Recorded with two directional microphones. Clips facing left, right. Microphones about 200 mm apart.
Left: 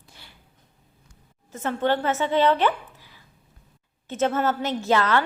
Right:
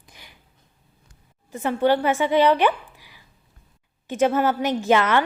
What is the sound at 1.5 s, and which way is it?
A woman's voice, 10° right (ahead or behind).